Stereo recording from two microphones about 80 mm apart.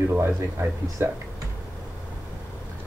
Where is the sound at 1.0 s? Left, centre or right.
Right.